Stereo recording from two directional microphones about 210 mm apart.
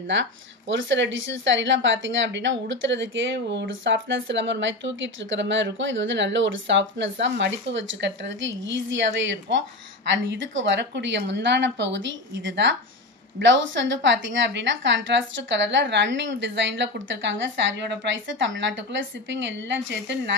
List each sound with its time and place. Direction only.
0.0 s speech: 60° right (ahead or behind)